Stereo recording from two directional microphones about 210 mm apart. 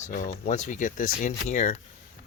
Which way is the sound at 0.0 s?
40° left (ahead or behind).